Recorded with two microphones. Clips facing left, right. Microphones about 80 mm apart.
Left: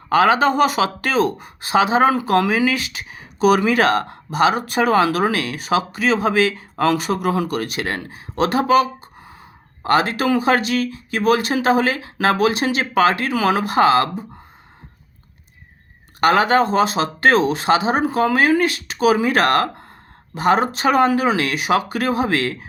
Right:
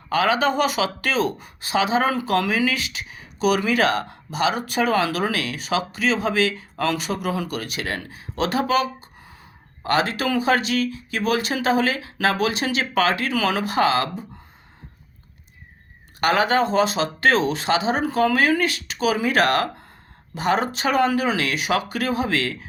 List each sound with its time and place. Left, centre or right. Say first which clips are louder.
0.1 s speech: left 5 dB; left
2.4 s speech: left 4 dB; left
2.6 s speech: left 4 dB; left
16.2 s speech: left 4 dB; left
18.0 s speech: left 2 dB; left